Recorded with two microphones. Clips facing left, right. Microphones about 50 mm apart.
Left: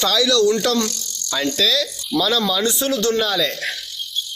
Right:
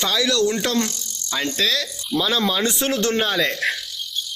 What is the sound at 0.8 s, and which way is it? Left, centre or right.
Cricket, left.